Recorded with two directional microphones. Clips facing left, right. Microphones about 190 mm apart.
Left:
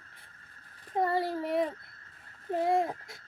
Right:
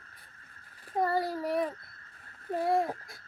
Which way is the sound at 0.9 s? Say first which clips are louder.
Even; 25° left (ahead or behind).